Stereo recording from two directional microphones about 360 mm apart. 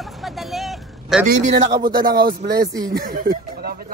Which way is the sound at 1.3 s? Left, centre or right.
Right.